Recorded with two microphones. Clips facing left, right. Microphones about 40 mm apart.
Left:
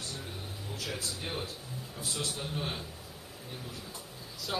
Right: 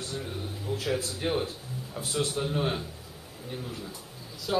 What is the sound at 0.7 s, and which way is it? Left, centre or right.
Speech, right.